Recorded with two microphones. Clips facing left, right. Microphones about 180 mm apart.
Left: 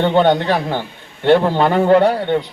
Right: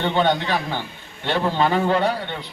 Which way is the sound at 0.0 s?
55° left (ahead or behind).